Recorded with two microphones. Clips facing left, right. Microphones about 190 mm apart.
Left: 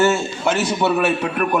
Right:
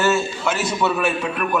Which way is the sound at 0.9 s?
50° left (ahead or behind).